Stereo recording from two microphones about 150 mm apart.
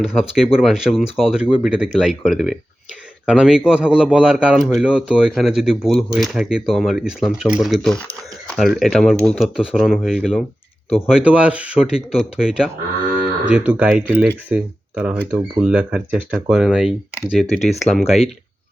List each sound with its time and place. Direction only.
0.0 s speech: 5° right (ahead or behind)
12.4 s livestock: 5° right (ahead or behind)
14.2 s speech: 5° right (ahead or behind)
15.3 s speech: 20° right (ahead or behind)
15.6 s speech: 10° right (ahead or behind)